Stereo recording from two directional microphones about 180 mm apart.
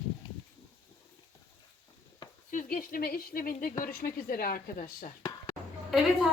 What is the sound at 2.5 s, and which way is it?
A woman's voice, 50° left (ahead or behind).